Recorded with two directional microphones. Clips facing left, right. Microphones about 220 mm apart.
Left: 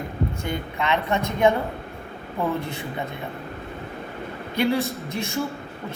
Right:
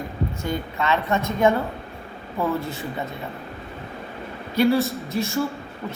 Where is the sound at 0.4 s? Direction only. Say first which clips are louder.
Right 2 dB; 15° left (ahead or behind).